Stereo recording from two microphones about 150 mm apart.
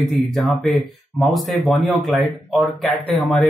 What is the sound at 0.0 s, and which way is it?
Speech, centre (ahead or behind).